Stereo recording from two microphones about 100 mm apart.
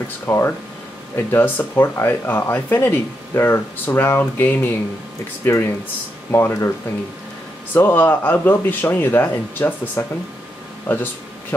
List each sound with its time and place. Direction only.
0.3 s speech: 25° left (ahead or behind)
7.7 s speech: 20° left (ahead or behind)